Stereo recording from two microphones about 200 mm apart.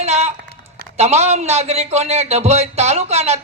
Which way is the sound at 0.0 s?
35° right (ahead or behind).